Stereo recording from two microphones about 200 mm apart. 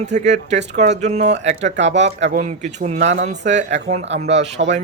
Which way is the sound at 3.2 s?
35° right (ahead or behind).